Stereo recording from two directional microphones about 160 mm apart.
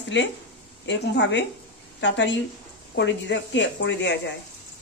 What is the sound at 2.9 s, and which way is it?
Speech, 90° left.